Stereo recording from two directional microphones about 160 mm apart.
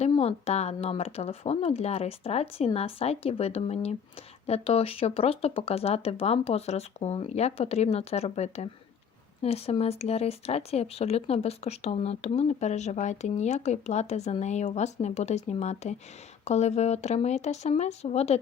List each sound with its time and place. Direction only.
0.2 s speech: 40° left (ahead or behind)